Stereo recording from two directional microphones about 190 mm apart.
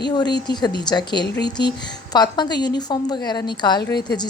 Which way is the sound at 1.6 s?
60° left (ahead or behind).